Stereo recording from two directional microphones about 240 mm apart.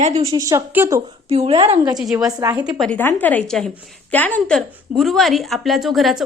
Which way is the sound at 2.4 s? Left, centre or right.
Centre.